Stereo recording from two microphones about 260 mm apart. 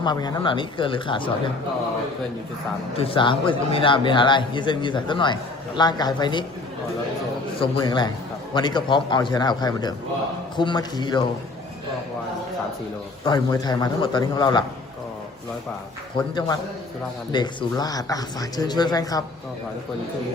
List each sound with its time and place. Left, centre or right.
0.0 s speech: centre
3.0 s speech: centre
7.6 s speech: centre
13.2 s speech: centre
16.1 s speech: centre